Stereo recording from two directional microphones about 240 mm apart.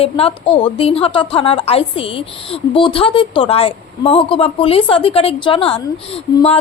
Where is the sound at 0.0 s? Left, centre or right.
Left.